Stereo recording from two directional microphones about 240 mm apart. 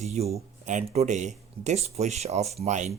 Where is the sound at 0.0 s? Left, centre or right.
Right.